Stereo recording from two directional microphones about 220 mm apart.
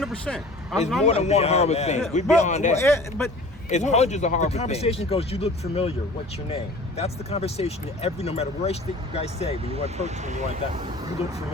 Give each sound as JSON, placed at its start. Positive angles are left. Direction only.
{"t": 0.0, "sound": "speech", "side_deg": 0}
{"t": 1.0, "sound": "a man's voice", "side_deg": 30}
{"t": 2.7, "sound": "speech", "side_deg": 10}
{"t": 3.7, "sound": "speech", "side_deg": 30}
{"t": 9.7, "sound": "speech", "side_deg": -30}